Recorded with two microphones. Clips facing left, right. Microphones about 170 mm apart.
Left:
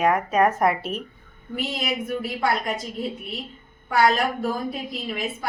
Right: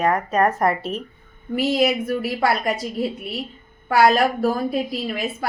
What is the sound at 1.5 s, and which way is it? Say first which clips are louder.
A woman's voice: right 9 dB; 80° right.